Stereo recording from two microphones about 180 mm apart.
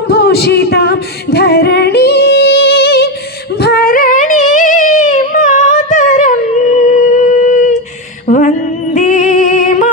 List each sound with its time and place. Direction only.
0.1 s female singing: 60° left (ahead or behind)
3.6 s a sound: 55° left (ahead or behind)
8.9 s music: 45° left (ahead or behind)